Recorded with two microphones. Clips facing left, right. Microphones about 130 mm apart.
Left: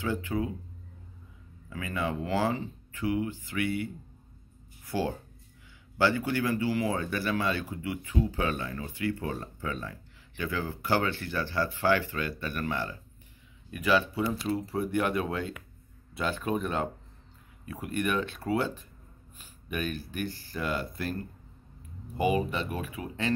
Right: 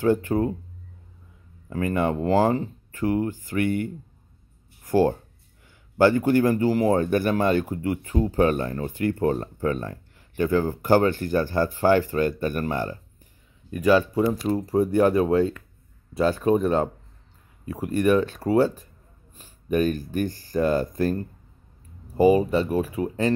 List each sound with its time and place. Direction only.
0.0 s speech: 45° right (ahead or behind)
1.7 s speech: 50° right (ahead or behind)
4.8 s a sound: 50° right (ahead or behind)
5.9 s speech: 45° right (ahead or behind)